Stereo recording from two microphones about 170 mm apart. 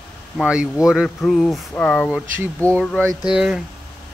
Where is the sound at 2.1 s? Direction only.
5° right (ahead or behind).